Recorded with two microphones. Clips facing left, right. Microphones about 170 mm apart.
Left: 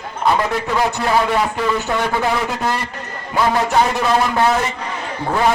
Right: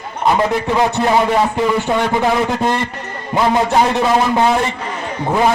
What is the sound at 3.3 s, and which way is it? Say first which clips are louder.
A man's voice: right 2 dB; 20° right (ahead or behind).